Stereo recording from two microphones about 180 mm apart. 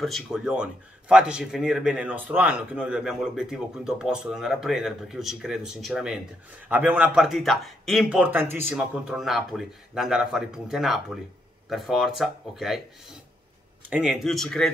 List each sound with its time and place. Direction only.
0.0 s speech: centre (ahead or behind)
13.8 s speech: 5° right (ahead or behind)